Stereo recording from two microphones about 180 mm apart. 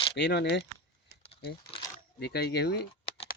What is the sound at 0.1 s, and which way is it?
Speech, 70° left (ahead or behind).